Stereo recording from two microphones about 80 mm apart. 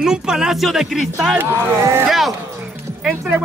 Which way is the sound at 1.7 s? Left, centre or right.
Right.